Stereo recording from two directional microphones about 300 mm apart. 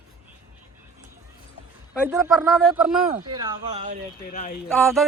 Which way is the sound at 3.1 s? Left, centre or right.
Centre.